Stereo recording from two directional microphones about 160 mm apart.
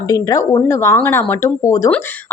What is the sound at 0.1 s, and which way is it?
A woman's voice, 20° left (ahead or behind).